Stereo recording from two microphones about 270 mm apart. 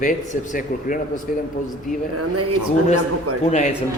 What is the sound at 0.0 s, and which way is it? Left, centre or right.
Speech, left.